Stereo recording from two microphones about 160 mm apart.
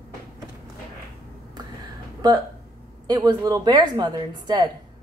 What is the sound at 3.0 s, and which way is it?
A woman's voice, 25° right (ahead or behind).